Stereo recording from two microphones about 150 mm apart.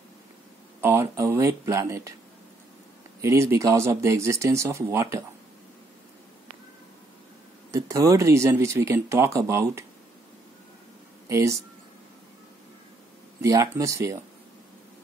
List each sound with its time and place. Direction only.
0.7 s speech: 15° right (ahead or behind)
3.2 s speech: 20° right (ahead or behind)
7.7 s speech: 20° right (ahead or behind)
11.2 s speech: 20° right (ahead or behind)
13.4 s speech: 25° right (ahead or behind)